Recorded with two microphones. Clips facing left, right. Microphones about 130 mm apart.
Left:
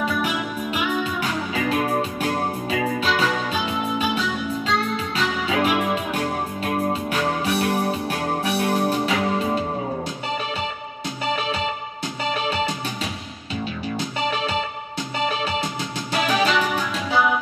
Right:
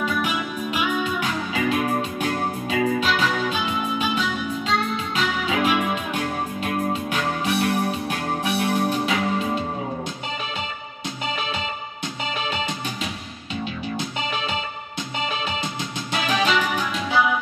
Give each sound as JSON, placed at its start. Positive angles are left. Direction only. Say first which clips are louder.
{"t": 0.0, "sound": "music", "louder": "left 1 dB", "side_deg": 35}
{"t": 12.4, "sound": "music", "louder": "left 3 dB", "side_deg": 40}
{"t": 16.1, "sound": "music", "louder": "left 2 dB", "side_deg": 40}